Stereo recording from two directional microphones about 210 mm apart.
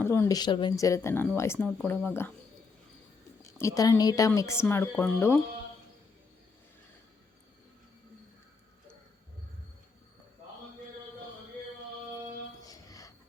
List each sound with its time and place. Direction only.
0.0 s speech: 10° left (ahead or behind)
3.6 s speech: 15° left (ahead or behind)
12.6 s music: 15° left (ahead or behind)